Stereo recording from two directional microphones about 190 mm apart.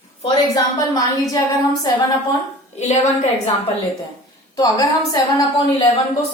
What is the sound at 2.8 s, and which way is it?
Speech, 35° left (ahead or behind).